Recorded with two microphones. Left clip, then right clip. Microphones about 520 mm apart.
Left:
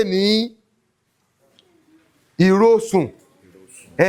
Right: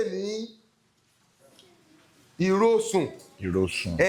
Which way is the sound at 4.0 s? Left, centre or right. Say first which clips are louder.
Left 6 dB; left.